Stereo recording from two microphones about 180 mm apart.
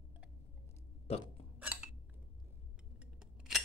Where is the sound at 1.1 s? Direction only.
35° left (ahead or behind).